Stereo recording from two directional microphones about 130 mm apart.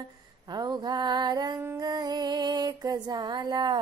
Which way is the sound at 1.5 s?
20° right (ahead or behind).